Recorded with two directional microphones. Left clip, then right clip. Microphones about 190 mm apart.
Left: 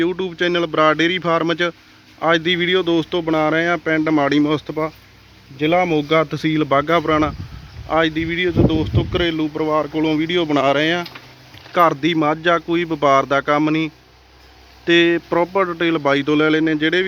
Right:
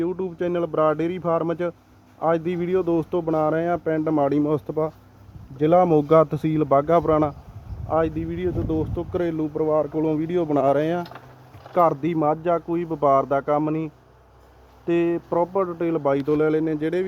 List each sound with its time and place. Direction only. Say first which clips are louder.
0.0 s speech: left 6 dB; 5° left (ahead or behind)
5.5 s speech: even; 25° right (ahead or behind)
6.5 s speech: left 5 dB; 10° right (ahead or behind)
7.9 s speech: left 5 dB; centre (ahead or behind)